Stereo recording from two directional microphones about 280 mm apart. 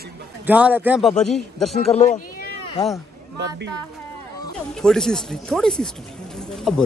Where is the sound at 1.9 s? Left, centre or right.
Left.